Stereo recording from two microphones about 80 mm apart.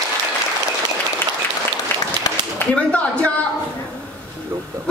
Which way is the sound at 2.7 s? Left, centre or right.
Centre.